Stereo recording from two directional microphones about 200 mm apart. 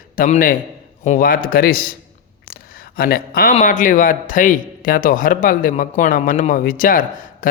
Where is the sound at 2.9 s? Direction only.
45° left (ahead or behind).